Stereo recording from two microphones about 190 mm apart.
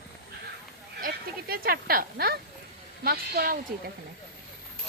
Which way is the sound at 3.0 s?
55° right (ahead or behind).